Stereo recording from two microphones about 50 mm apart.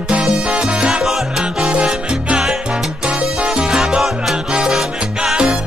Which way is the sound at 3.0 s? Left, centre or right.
Right.